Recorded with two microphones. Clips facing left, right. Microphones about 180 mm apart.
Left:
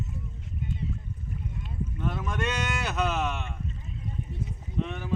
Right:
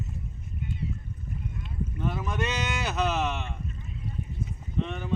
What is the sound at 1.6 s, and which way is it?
Boat, centre (ahead or behind).